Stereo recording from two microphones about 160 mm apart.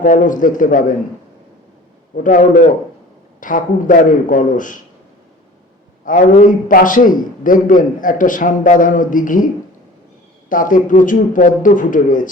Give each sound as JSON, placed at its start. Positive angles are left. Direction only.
{"t": 0.0, "sound": "a man's voice", "side_deg": 55}
{"t": 2.1, "sound": "a man's voice", "side_deg": 55}
{"t": 6.1, "sound": "a man's voice", "side_deg": 55}
{"t": 10.5, "sound": "a man's voice", "side_deg": 55}